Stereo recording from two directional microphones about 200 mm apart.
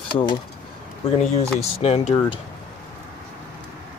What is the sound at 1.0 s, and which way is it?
Speech, 25° left (ahead or behind).